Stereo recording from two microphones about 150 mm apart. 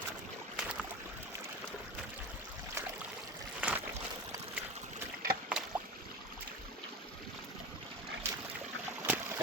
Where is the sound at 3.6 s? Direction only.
10° right (ahead or behind).